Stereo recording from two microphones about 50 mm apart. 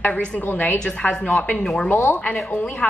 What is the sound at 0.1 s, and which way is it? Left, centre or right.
Speech, centre.